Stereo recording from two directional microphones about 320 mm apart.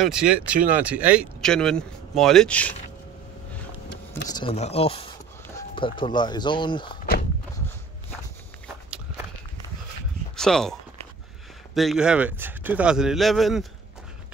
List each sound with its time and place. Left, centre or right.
0.0 s speech: centre
4.3 s speech: centre
10.3 s speech: centre